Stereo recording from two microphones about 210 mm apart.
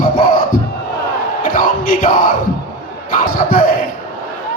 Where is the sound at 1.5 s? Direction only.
40° left (ahead or behind).